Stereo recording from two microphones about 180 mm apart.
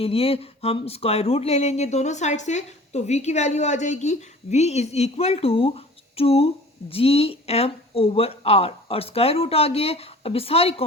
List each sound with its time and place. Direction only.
0.0 s speech: 35° left (ahead or behind)